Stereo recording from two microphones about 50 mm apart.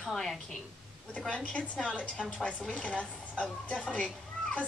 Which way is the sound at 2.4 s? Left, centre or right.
Left.